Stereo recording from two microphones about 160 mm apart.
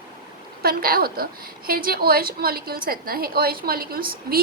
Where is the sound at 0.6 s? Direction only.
70° right (ahead or behind).